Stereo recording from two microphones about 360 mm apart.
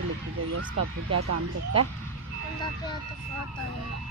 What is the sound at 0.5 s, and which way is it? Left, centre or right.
Speech, right.